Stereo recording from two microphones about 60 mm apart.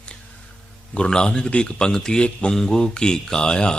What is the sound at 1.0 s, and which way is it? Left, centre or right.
Speech, centre.